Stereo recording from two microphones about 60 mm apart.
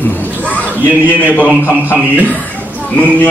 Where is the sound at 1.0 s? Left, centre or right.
Left.